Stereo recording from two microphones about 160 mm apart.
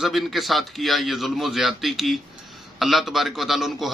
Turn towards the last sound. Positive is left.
turn(degrees=0)  # may be behind; listen again after turning